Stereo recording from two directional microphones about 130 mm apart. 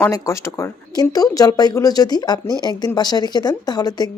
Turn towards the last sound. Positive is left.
turn(degrees=30)  # may be behind; listen again after turning